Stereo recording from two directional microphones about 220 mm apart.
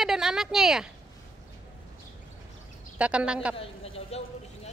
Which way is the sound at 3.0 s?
5° right (ahead or behind).